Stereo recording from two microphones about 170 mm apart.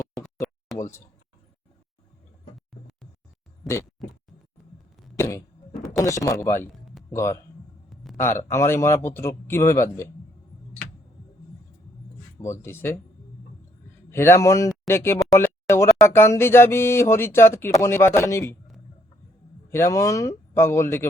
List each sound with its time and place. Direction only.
0.4 s a sound: centre (ahead or behind)
6.0 s a man's voice: 20° left (ahead or behind)
12.4 s a man's voice: 15° left (ahead or behind)
14.1 s a man's voice: 15° left (ahead or behind)
19.7 s a man's voice: 15° left (ahead or behind)